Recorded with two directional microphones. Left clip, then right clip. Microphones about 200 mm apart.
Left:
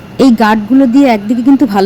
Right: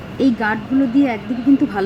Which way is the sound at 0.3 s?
35° left (ahead or behind).